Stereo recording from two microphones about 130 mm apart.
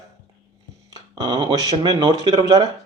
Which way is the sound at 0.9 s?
30° right (ahead or behind).